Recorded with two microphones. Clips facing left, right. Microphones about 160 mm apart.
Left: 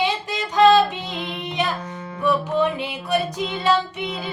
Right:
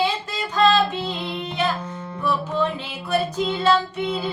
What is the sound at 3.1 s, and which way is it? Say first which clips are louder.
Music: right 2 dB; 15° left (ahead or behind).